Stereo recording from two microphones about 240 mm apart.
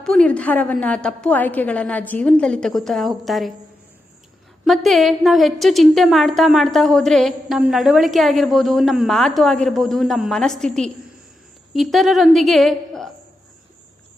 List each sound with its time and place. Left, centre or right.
0.0 s a woman's voice: centre
4.6 s a woman's voice: centre